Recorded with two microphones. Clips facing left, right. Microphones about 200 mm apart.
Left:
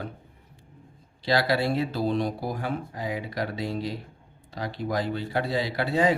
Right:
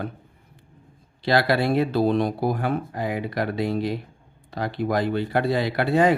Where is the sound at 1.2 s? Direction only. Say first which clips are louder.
Right 3 dB; 60° right (ahead or behind).